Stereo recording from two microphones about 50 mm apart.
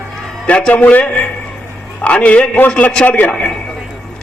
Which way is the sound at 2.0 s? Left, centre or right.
Left.